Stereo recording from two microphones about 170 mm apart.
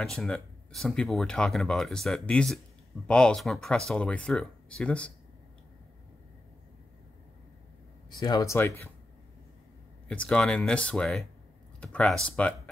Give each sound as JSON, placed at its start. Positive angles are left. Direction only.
{"t": 0.0, "sound": "speech", "side_deg": 5}
{"t": 8.2, "sound": "speech", "side_deg": 20}
{"t": 10.0, "sound": "speech", "side_deg": 5}